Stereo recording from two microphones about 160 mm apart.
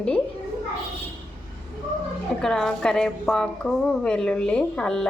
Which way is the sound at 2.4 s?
5° left (ahead or behind).